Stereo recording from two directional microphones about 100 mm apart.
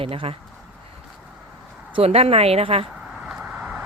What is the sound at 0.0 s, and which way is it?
Speech, 70° right (ahead or behind).